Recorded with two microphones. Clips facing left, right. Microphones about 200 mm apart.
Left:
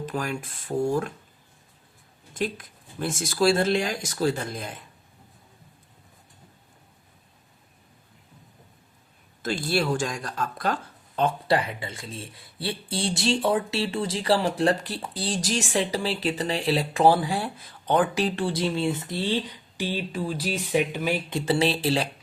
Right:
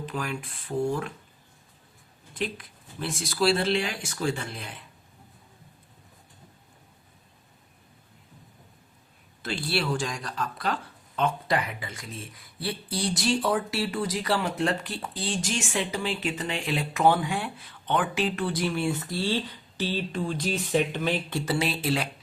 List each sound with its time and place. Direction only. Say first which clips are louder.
0.0 s speech: left 3 dB; 45° left (ahead or behind)
2.4 s speech: left 3 dB; 45° left (ahead or behind)
9.4 s speech: left 4 dB; 45° left (ahead or behind)
11.2 s speech: left 3 dB; 35° left (ahead or behind)